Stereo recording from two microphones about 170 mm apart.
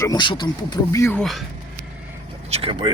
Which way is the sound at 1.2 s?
Centre (ahead or behind).